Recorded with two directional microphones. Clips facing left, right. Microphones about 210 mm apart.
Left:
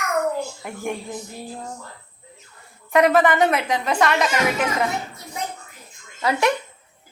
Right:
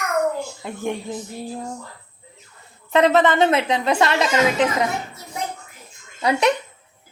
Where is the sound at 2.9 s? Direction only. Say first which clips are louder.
Even; 25° right (ahead or behind).